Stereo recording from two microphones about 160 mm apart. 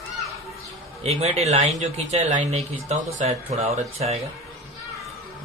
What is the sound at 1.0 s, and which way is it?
Speech, 40° right (ahead or behind).